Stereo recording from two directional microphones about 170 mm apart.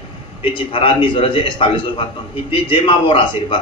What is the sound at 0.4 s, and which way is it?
A man's voice, 30° left (ahead or behind).